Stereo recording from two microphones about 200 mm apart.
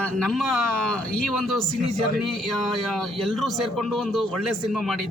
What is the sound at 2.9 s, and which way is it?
A man's voice, centre (ahead or behind).